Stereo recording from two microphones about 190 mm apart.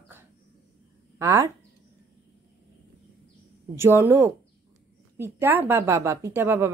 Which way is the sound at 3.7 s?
15° right (ahead or behind).